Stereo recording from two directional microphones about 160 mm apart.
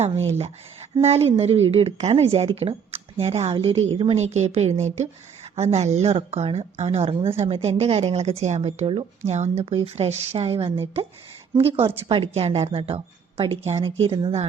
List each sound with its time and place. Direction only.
1.0 s a woman's voice: 40° right (ahead or behind)